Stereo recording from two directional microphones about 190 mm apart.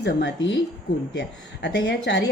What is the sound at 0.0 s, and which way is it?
Speech, 70° left (ahead or behind).